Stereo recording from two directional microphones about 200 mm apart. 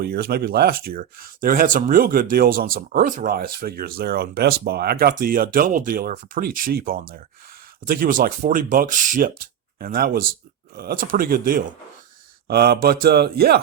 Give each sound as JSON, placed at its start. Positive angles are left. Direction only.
{"t": 0.0, "sound": "speech", "side_deg": -50}